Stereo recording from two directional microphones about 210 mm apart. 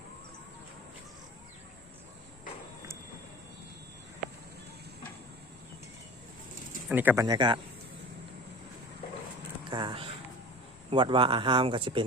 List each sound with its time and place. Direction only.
6.8 s speech: 10° right (ahead or behind)
7.3 s speech: 20° right (ahead or behind)
9.6 s a sound: 20° right (ahead or behind)
10.9 s speech: 25° right (ahead or behind)